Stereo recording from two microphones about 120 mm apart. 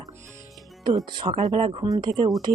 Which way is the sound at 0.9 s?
40° right (ahead or behind).